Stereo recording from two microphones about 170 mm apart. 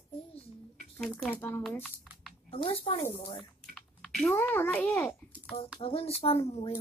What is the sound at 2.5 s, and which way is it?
Speech, 35° left (ahead or behind).